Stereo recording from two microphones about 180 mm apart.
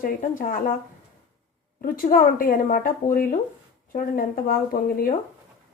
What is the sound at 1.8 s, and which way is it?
Speech, 50° left (ahead or behind).